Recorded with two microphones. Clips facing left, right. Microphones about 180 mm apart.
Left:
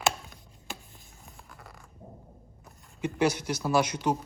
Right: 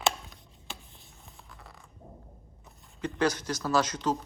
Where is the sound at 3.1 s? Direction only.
10° left (ahead or behind).